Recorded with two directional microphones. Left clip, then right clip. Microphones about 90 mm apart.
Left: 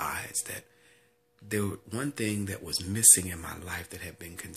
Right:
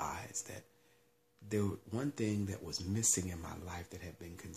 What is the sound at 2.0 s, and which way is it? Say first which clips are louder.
Speech: left 6 dB; 20° right (ahead or behind).